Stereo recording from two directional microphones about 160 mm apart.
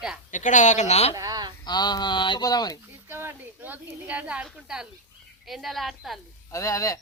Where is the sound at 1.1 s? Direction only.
20° right (ahead or behind).